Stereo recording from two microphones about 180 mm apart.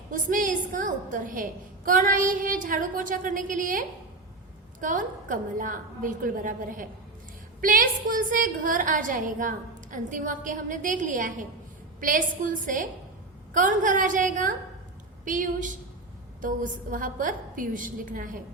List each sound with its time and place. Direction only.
0.1 s a woman's voice: 45° right (ahead or behind)